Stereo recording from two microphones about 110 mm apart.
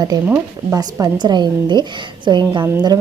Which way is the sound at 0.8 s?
35° right (ahead or behind).